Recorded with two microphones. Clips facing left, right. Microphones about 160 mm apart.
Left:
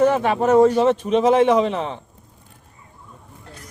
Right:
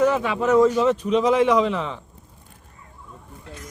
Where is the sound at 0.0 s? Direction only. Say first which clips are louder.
Left 3 dB; 55° left (ahead or behind).